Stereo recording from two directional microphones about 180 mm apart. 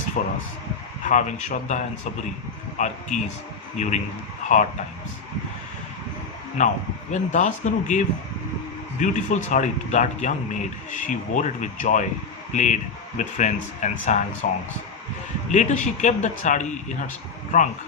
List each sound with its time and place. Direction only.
0.2 s speech: 45° left (ahead or behind)
4.4 s a sound: 45° left (ahead or behind)
6.6 s speech: 40° left (ahead or behind)
15.5 s speech: 40° left (ahead or behind)